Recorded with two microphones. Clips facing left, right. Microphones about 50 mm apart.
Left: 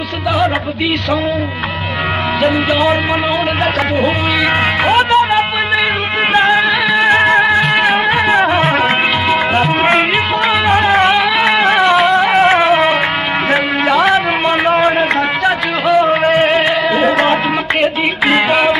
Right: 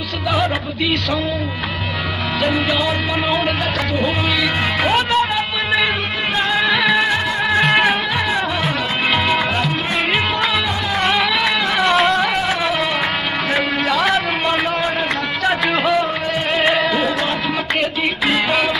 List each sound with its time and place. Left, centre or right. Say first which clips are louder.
2.4 s music: left 5 dB; centre
4.8 s music: left 6 dB; centre
6.5 s music: left 4 dB; centre
7.1 s music: left 9 dB; left
7.4 s music: left 3 dB; centre
8.3 s music: left 8 dB; left
11.0 s music: left 6 dB; centre
11.6 s music: left 6 dB; left
11.9 s music: left 4 dB; centre
12.4 s music: left 10 dB; left
13.8 s a sound: left 7 dB; centre
15.0 s music: left 6 dB; centre
18.5 s music: left 6 dB; left